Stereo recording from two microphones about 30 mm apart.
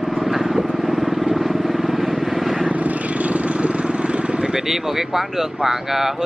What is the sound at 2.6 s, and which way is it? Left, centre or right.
Vehicle, right.